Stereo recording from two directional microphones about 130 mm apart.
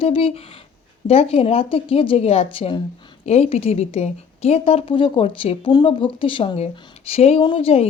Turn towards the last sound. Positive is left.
turn(degrees=50)  # may be behind; listen again after turning